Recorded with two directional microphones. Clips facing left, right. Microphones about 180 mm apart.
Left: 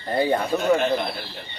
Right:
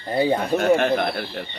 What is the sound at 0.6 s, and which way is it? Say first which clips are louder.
Speech: right 2 dB; 60° right (ahead or behind).